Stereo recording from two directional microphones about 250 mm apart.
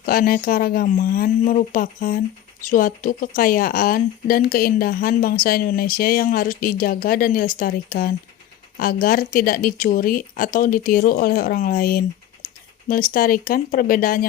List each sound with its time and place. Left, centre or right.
0.0 s speech: left